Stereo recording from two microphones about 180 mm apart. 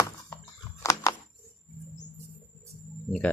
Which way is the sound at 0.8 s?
20° left (ahead or behind).